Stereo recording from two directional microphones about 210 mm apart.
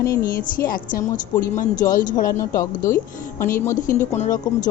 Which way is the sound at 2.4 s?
15° left (ahead or behind).